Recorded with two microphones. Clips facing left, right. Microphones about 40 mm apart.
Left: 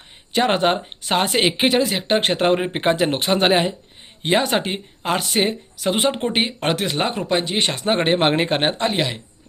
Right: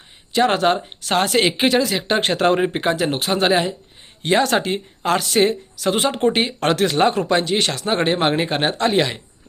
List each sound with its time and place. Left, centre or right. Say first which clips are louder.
0.4 s speech: right 1 dB; left
2.7 s speech: left 1 dB; left
4.4 s speech: right 2 dB; centre; by 8.7 s left
8.8 s speech: right 3 dB; centre